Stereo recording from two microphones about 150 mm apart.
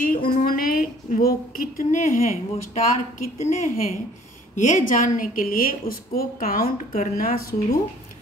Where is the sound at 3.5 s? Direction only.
70° left (ahead or behind); by 7.8 s 85° left.